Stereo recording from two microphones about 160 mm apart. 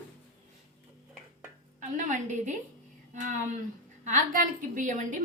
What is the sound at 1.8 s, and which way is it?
Speech, 50° right (ahead or behind).